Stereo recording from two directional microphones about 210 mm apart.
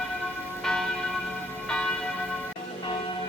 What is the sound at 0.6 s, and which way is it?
Church bell, centre (ahead or behind).